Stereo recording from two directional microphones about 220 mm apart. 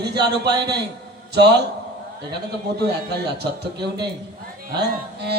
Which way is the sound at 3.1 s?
50° right (ahead or behind).